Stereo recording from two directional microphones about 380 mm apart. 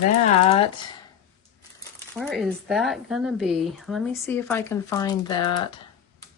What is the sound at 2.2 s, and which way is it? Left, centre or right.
Speech, centre.